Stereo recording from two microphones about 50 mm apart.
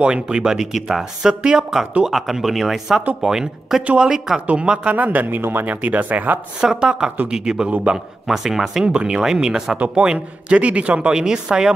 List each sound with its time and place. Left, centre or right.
0.0 s speech: centre
3.8 s speech: right
4.9 s speech: right
5.8 s speech: right
6.6 s speech: centre
8.8 s speech: centre
10.1 s speech: right